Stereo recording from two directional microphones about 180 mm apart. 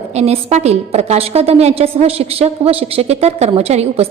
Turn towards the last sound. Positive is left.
turn(degrees=-35)  # may be behind; listen again after turning